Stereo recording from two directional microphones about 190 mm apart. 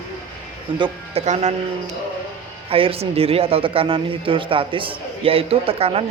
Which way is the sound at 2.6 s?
30° right (ahead or behind).